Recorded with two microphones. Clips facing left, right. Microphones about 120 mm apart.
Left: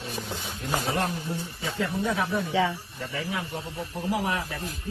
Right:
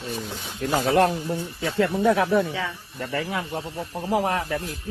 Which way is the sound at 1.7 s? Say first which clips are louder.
Right 8 dB; 80° right.